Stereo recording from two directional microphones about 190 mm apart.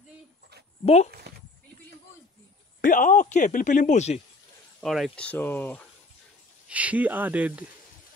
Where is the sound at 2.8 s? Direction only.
45° left (ahead or behind).